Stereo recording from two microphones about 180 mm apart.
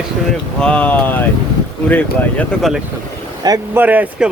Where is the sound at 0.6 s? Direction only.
5° left (ahead or behind).